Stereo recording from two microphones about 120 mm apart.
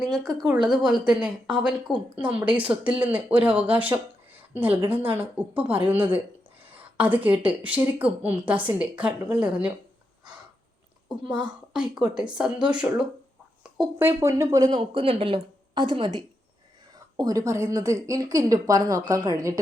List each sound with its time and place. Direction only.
0.2 s speech: 30° right (ahead or behind)
0.9 s a woman's voice: 5° right (ahead or behind)
11.1 s a woman's voice: 5° right (ahead or behind)
14.0 s a woman's voice: 20° right (ahead or behind)
14.8 s a woman's voice: 50° right (ahead or behind)
17.2 s a woman's voice: 30° right (ahead or behind)